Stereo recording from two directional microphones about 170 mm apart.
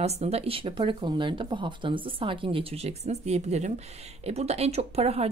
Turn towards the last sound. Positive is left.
turn(degrees=-40)  # may be behind; listen again after turning